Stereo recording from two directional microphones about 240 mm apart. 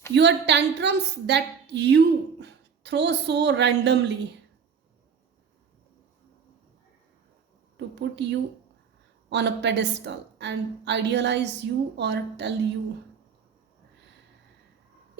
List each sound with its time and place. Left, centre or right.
0.1 s a woman's voice: right
7.8 s a sound: right
9.3 s a woman's voice: right